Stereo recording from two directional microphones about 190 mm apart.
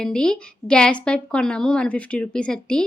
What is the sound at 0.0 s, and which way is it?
Speech, 5° left (ahead or behind).